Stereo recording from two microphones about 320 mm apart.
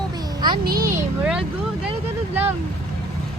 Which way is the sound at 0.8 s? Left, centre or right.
Centre.